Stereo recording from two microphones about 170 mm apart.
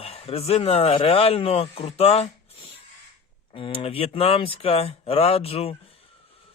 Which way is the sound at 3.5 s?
35° left (ahead or behind).